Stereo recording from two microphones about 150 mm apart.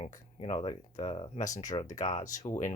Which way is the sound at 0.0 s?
45° left (ahead or behind).